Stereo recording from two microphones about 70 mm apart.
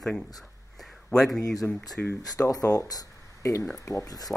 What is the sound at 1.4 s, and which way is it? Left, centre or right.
Speech, left.